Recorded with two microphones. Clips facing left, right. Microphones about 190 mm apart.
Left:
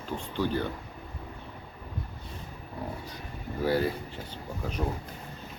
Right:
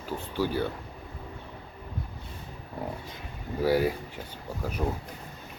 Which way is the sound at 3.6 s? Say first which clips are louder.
Right 2 dB; 10° right (ahead or behind).